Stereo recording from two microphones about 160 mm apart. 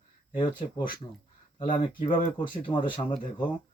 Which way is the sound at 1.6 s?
30° left (ahead or behind).